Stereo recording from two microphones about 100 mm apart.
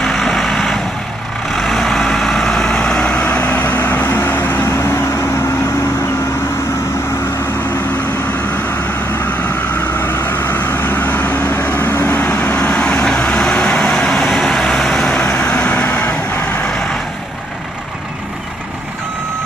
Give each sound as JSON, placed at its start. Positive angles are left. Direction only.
{"t": 0.0, "sound": "vehicle", "side_deg": 5}
{"t": 3.4, "sound": "vehicle", "side_deg": 20}
{"t": 9.9, "sound": "vehicle", "side_deg": 20}
{"t": 12.2, "sound": "vehicle", "side_deg": 10}